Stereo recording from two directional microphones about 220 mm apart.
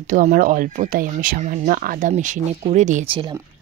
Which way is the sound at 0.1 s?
35° right (ahead or behind).